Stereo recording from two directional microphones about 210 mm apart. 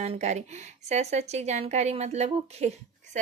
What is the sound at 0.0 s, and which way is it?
A woman's voice, 35° right (ahead or behind).